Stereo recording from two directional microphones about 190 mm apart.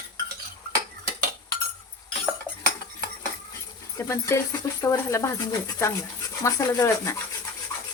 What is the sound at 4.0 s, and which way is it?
Speech, 15° left (ahead or behind).